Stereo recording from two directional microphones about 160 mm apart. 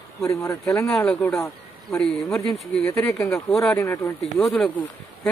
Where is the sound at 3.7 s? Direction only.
20° left (ahead or behind).